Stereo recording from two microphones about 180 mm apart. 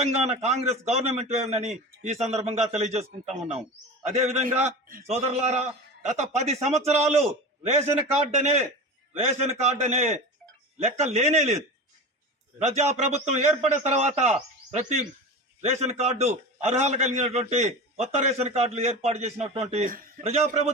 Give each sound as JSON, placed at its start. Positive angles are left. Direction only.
{"t": 0.3, "sound": "a man's voice", "side_deg": -40}
{"t": 20.2, "sound": "a man's voice", "side_deg": -35}